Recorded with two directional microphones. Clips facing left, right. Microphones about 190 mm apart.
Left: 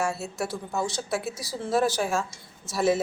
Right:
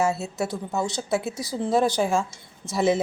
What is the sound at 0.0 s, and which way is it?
A woman's voice, 20° right (ahead or behind).